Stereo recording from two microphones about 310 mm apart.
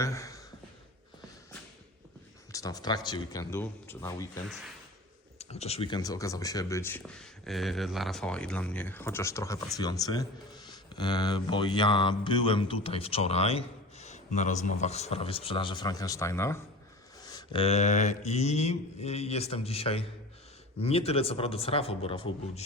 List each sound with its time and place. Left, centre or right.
0.0 s sigh: centre
2.5 s speech: centre
5.4 s speech: centre
17.2 s mantra: centre